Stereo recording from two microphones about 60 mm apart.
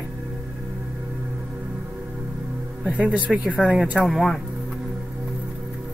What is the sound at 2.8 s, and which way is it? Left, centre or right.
Speech, right.